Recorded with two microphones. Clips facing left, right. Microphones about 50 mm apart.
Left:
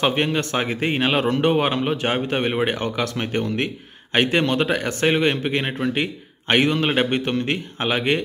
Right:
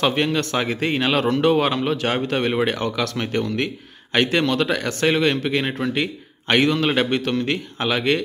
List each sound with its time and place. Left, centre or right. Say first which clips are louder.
0.0 s a man's voice: even; left